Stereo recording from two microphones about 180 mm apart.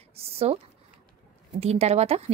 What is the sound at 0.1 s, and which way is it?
Speech, 35° right (ahead or behind).